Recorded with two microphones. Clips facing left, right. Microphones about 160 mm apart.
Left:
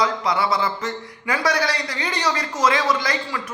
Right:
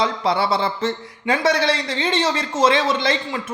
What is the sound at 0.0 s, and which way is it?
Speech, 30° right (ahead or behind).